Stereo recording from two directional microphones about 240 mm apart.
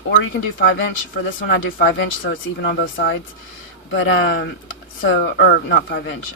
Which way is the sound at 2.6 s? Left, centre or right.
Left.